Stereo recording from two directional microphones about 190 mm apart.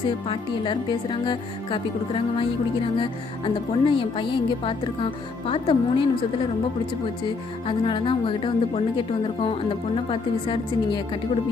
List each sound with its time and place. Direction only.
0.3 s speech: 25° left (ahead or behind)
7.7 s speech: 25° left (ahead or behind)